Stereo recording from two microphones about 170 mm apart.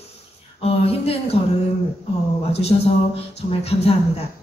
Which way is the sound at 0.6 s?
35° left (ahead or behind).